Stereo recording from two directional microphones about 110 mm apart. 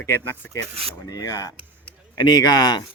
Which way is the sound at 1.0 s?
30° left (ahead or behind).